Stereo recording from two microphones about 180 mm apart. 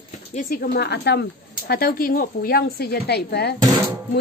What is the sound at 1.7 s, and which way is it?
Speech, 55° left (ahead or behind).